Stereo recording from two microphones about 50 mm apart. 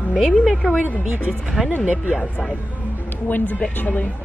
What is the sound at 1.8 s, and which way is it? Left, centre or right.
Speech, right.